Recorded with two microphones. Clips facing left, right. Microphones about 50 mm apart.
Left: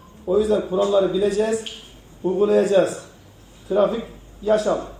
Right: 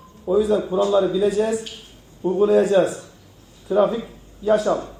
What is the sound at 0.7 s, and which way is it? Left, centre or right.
A man's voice, centre.